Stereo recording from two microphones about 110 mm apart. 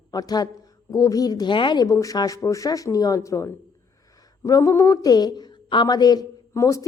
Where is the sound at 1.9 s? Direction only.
30° left (ahead or behind).